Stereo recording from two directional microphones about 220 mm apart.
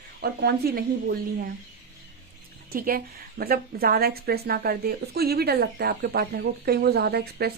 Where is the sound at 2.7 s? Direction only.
40° right (ahead or behind).